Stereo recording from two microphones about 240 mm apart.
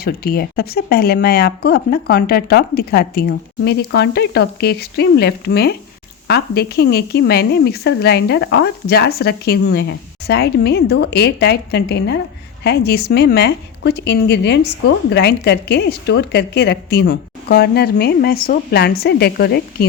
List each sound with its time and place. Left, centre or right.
0.0 s a woman's voice: left